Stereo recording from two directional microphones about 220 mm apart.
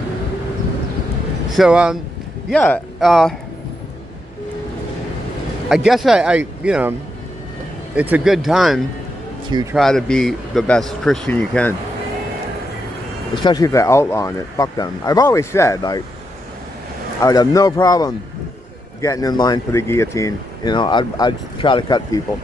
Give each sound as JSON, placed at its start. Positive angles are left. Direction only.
{"t": 1.6, "sound": "a man's voice", "side_deg": -5}
{"t": 5.9, "sound": "a man's voice", "side_deg": 0}
{"t": 9.5, "sound": "speech", "side_deg": -20}
{"t": 9.8, "sound": "a man's voice", "side_deg": 0}
{"t": 13.3, "sound": "speech", "side_deg": 20}
{"t": 17.2, "sound": "speech", "side_deg": 15}